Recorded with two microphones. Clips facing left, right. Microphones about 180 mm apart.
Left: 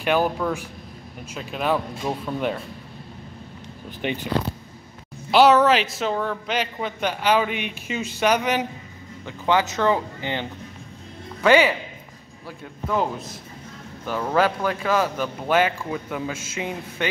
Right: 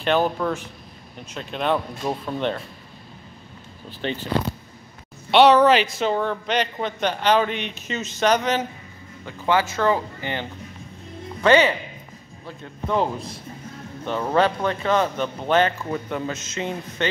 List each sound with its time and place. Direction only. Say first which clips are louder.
0.0 s a man's voice: even; 10° left (ahead or behind)
4.0 s a man's voice: left 1 dB; 15° left (ahead or behind)
5.3 s a man's voice: right 1 dB; 5° left (ahead or behind)
11.4 s a man's voice: even; 10° left (ahead or behind)